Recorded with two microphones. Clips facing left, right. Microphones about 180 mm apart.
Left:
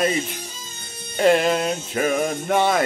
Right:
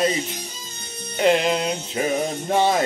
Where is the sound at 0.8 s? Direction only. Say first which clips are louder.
Right 6 dB; 40° right (ahead or behind).